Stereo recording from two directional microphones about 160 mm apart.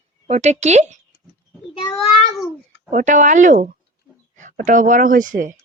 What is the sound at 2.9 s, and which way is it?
Speech, 50° right (ahead or behind).